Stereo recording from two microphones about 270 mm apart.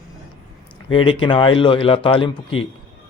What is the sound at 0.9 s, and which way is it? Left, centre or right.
A man's voice, centre.